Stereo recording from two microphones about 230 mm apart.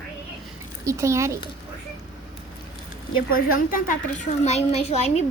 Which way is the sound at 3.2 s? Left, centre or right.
Left.